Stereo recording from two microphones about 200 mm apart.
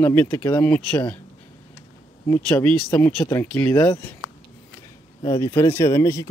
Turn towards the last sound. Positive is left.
turn(degrees=15)  # may be behind; listen again after turning